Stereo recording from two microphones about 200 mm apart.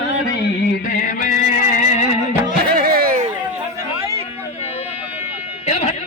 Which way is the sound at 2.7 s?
45° right (ahead or behind).